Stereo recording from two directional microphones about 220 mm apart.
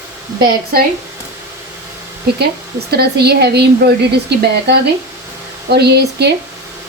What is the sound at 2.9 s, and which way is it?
Speech, 45° right (ahead or behind).